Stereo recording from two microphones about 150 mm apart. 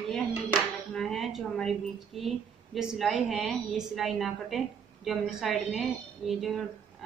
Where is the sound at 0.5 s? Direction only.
Centre (ahead or behind).